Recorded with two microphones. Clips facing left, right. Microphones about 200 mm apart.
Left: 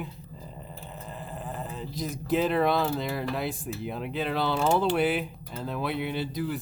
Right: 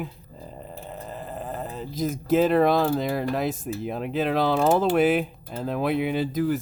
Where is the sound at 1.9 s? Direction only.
50° right (ahead or behind).